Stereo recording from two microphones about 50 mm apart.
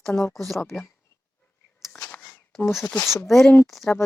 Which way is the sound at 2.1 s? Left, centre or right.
Left.